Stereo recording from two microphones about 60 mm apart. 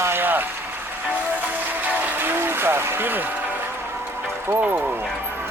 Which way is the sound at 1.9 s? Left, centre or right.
Right.